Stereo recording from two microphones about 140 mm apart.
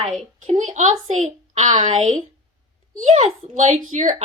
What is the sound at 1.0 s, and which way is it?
Speech, 50° right (ahead or behind).